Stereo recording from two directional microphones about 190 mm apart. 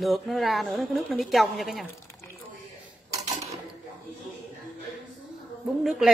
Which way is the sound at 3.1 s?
20° right (ahead or behind).